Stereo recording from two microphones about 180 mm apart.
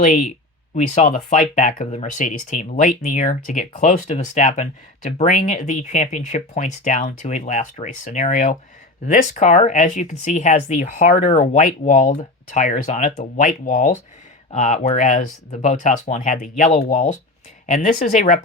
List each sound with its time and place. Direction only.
0.0 s speech: 45° left (ahead or behind)